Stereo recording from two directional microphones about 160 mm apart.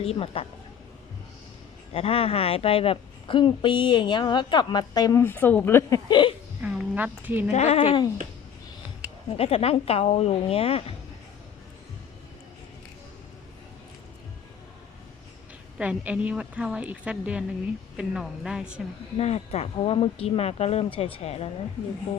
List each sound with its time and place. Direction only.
0.0 s speech: 35° left (ahead or behind)
1.9 s a woman's voice: 40° left (ahead or behind); by 6.0 s 15° left (ahead or behind)
6.1 s a woman's voice: 30° left (ahead or behind)
6.6 s speech: 10° right (ahead or behind)
7.5 s speech: 40° left (ahead or behind)
9.3 s speech: 40° left (ahead or behind)
15.8 s a woman's voice: 10° right (ahead or behind)
19.1 s speech: 40° left (ahead or behind)